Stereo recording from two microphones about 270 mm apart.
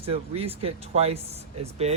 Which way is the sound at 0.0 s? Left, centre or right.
Right.